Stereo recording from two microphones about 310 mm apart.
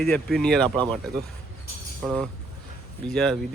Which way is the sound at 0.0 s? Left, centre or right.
Centre.